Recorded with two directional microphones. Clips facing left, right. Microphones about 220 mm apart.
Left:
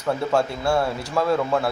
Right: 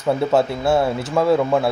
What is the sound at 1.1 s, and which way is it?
Speech, 20° right (ahead or behind).